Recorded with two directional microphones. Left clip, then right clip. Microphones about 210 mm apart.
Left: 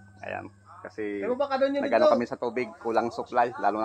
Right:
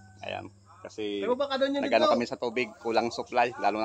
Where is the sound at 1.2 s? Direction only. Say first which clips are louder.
Left 2 dB; 20° right (ahead or behind).